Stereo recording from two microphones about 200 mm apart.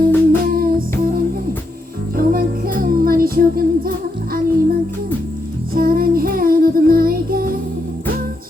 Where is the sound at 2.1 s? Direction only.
45° right (ahead or behind).